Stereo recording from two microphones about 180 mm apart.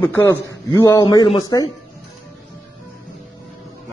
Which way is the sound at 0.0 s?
10° left (ahead or behind).